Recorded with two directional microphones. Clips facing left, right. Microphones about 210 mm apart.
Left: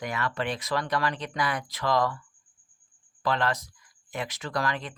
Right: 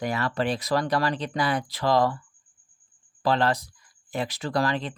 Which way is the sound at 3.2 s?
30° right (ahead or behind).